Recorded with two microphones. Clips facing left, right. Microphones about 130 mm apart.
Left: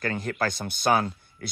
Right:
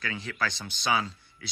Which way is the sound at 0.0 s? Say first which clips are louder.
Left 5 dB; 50° left (ahead or behind).